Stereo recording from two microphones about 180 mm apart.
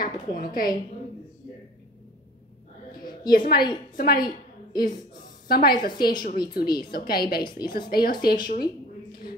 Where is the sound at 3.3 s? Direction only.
55° left (ahead or behind).